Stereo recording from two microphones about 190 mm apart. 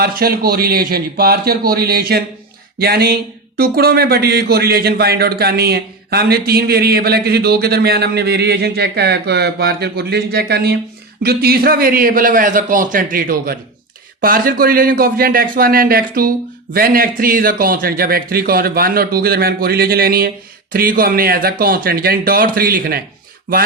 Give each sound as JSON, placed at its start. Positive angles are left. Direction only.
{"t": 0.0, "sound": "a man's voice", "side_deg": -55}